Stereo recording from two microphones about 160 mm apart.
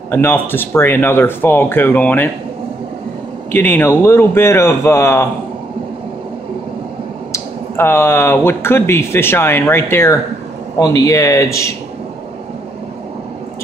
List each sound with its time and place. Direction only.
0.1 s speech: 15° left (ahead or behind)
3.5 s speech: 15° left (ahead or behind)
7.3 s speech: 15° left (ahead or behind)